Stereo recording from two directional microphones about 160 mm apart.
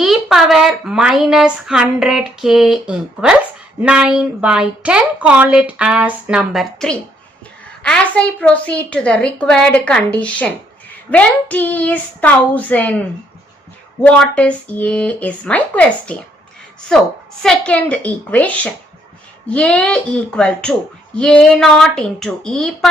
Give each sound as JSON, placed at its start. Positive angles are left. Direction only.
{"t": 0.0, "sound": "a woman's voice", "side_deg": 0}
{"t": 14.0, "sound": "a woman's voice", "side_deg": 5}